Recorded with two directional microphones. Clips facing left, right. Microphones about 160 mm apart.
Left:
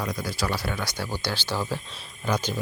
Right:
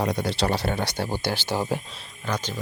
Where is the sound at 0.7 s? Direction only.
55° right (ahead or behind).